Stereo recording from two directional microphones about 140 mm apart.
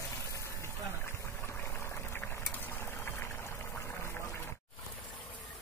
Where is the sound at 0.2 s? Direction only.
20° left (ahead or behind).